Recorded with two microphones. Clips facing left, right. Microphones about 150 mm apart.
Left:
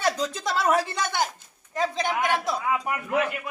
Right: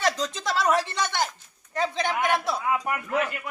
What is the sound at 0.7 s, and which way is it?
Speech, 10° left (ahead or behind).